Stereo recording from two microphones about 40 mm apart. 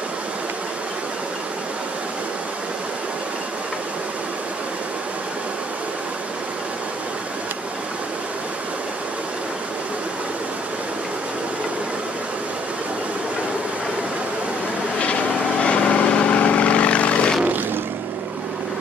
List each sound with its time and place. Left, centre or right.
15.6 s vehicle: left